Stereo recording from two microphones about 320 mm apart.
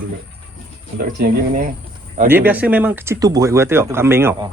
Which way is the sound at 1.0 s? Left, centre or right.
Right.